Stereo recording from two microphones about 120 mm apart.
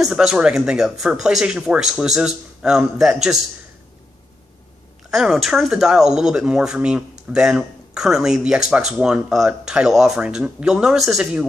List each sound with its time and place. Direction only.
0.0 s speech: 5° right (ahead or behind)
5.1 s speech: 5° right (ahead or behind)